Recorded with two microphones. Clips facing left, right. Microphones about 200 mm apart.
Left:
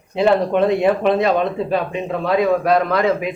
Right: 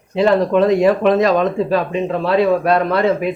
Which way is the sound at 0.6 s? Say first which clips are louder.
Right 3 dB; 40° right (ahead or behind).